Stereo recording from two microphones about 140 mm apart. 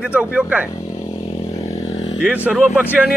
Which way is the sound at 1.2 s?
45° left (ahead or behind).